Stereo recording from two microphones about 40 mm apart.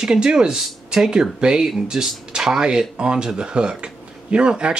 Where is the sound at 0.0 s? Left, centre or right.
Centre.